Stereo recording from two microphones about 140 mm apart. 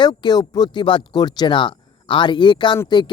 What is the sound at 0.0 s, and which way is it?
Speech, 30° left (ahead or behind).